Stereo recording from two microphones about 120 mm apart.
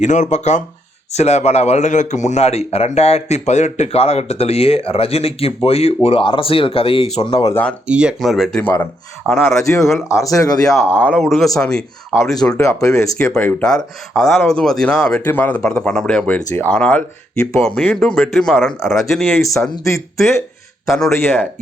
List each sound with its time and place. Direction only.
0.0 s a man's voice: 85° left; by 7.4 s 55° left (ahead or behind)
7.9 s speech: 10° right (ahead or behind)
8.6 s speech: 20° left (ahead or behind)
9.8 s speech: centre (ahead or behind)
10.2 s speech: 30° left (ahead or behind)
11.1 s speech: centre (ahead or behind)
12.5 s speech: 25° left (ahead or behind)
13.3 s speech: 10° left (ahead or behind)
15.2 s speech: 15° left (ahead or behind); by 19.4 s centre (ahead or behind)
19.8 s speech: 25° left (ahead or behind)
20.8 s speech: centre (ahead or behind)
21.1 s speech: 20° left (ahead or behind)